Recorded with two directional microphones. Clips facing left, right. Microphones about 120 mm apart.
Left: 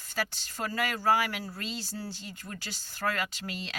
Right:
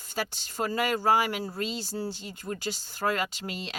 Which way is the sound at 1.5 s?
35° right (ahead or behind).